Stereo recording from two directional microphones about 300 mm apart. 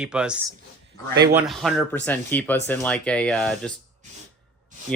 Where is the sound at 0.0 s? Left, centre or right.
Centre.